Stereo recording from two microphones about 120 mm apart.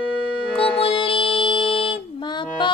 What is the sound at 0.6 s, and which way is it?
Music, 50° left (ahead or behind).